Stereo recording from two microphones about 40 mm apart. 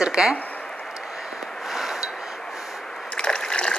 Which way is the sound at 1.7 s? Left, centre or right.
Centre.